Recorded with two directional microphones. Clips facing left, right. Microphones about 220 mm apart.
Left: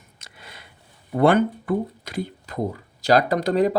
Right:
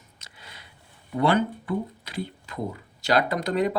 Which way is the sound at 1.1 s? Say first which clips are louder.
Left 5 dB; 50° left (ahead or behind).